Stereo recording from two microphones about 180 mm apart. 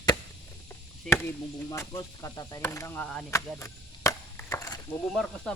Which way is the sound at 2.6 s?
15° left (ahead or behind).